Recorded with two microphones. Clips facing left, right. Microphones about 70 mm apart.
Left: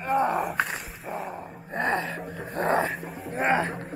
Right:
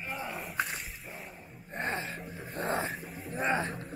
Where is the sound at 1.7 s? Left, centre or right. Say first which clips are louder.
Left 8 dB; left.